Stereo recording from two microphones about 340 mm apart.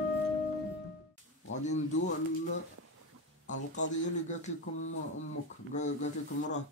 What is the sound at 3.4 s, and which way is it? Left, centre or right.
A man's voice, left.